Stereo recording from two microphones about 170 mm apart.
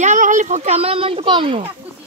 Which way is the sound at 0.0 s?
45° right (ahead or behind).